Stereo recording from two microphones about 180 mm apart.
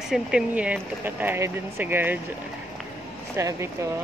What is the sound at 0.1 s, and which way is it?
Speech, 5° right (ahead or behind).